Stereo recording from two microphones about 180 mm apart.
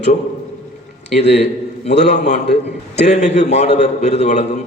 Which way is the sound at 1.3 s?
40° left (ahead or behind).